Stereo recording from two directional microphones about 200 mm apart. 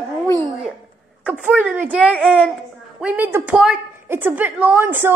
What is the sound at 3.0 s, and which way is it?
A woman's voice, 10° right (ahead or behind).